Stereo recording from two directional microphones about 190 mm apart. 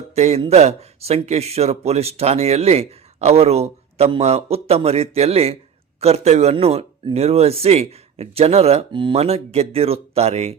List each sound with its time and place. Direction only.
0.2 s speech: 35° right (ahead or behind)